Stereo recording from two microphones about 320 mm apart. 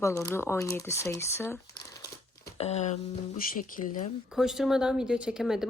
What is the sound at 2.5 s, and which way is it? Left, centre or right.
Speech, centre.